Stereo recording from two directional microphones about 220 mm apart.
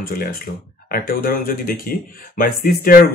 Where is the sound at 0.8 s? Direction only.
40° left (ahead or behind).